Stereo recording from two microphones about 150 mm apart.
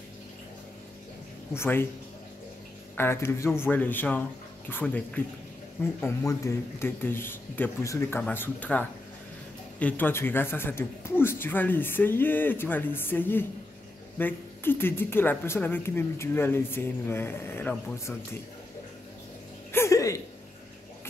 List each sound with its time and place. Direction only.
1.5 s speech: 15° left (ahead or behind)
3.0 s speech: 15° left (ahead or behind)
19.7 s a sound: 20° left (ahead or behind)